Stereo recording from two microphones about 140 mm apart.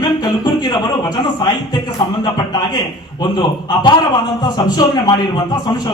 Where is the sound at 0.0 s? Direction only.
30° left (ahead or behind).